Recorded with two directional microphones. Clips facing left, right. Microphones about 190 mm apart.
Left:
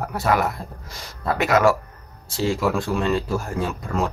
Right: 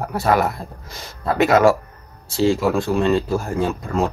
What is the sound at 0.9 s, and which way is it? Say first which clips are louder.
Speech: right 2 dB; 25° right (ahead or behind).